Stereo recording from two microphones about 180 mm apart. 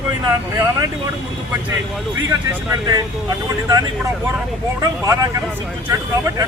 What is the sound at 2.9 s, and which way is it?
Speech, 20° right (ahead or behind).